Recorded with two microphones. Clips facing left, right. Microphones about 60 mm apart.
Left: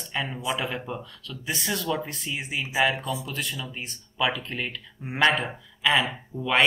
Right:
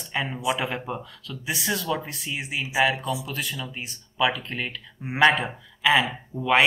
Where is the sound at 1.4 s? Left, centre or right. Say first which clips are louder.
Right 1 dB; centre.